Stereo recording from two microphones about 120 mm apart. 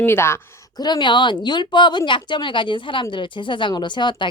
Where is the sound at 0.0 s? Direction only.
20° left (ahead or behind).